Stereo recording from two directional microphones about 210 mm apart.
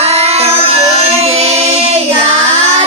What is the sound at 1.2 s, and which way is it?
Music, 30° right (ahead or behind).